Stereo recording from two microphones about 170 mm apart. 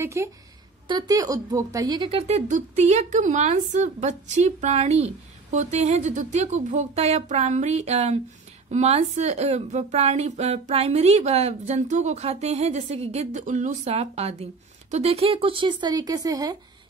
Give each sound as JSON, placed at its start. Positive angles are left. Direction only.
{"t": 0.0, "sound": "a woman's voice", "side_deg": -15}